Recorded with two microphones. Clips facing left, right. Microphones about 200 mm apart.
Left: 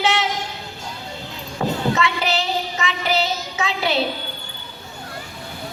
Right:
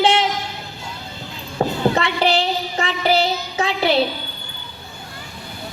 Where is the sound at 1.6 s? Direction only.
35° right (ahead or behind).